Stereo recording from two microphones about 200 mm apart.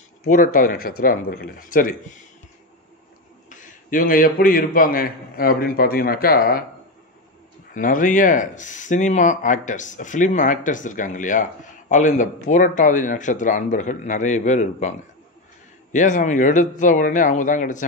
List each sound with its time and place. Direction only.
0.3 s a man's voice: 40° left (ahead or behind)
3.4 s a man's voice: 40° left (ahead or behind)
7.7 s speech: 40° left (ahead or behind)